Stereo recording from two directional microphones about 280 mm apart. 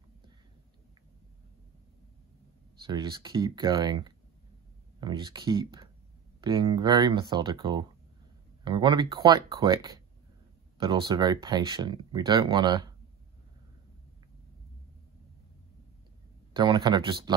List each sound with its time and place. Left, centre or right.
2.8 s speech: centre
16.5 s speech: centre